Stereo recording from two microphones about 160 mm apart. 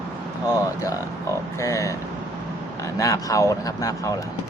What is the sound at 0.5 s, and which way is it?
A man's voice, 20° left (ahead or behind).